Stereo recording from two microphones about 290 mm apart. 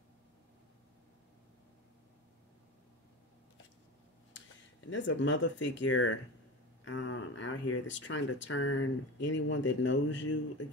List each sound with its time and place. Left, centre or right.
4.8 s speech: left